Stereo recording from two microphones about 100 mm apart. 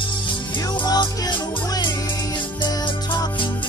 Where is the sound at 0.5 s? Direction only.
45° left (ahead or behind).